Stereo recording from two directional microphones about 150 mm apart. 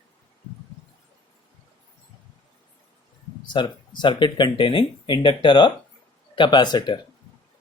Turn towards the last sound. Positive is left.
turn(degrees=30)  # may be behind; listen again after turning